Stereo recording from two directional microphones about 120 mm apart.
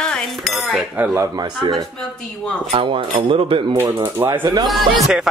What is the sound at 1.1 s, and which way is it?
Speech, 30° right (ahead or behind).